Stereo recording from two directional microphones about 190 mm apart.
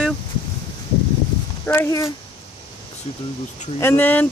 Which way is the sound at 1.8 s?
15° left (ahead or behind).